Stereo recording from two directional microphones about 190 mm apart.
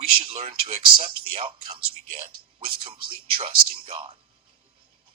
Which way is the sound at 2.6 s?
30° right (ahead or behind).